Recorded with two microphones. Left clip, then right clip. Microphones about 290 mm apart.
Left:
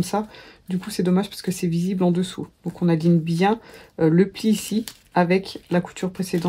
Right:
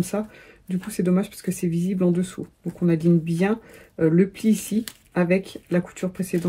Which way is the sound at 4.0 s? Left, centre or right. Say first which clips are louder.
Left 1 dB; left.